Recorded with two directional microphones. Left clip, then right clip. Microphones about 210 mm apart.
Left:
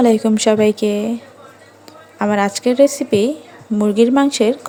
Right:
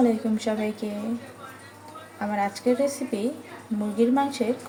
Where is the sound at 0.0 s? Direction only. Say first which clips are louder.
Left 11 dB; 50° left (ahead or behind).